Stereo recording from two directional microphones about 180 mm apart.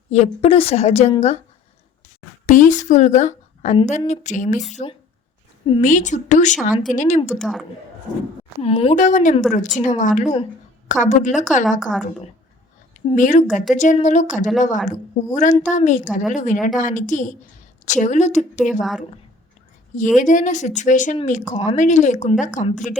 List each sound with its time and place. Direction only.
0.1 s a woman's voice: 35° left (ahead or behind)
2.5 s a woman's voice: 45° left (ahead or behind)
7.3 s a woman's voice: centre (ahead or behind)
8.6 s a woman's voice: 35° left (ahead or behind)
11.8 s a woman's voice: centre (ahead or behind)
13.1 s speech: 45° left (ahead or behind)
18.8 s a woman's voice: centre (ahead or behind)
20.1 s speech: 45° left (ahead or behind)